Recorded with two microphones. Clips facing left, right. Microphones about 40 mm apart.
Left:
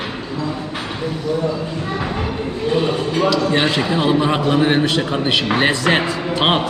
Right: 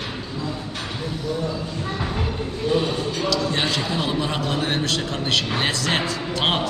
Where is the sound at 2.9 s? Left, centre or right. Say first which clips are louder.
Left 6 dB; left.